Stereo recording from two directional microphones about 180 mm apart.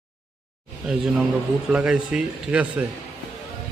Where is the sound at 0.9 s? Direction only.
5° right (ahead or behind).